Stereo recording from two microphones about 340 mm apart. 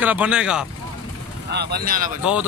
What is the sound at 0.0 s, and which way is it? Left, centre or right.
Speech, centre.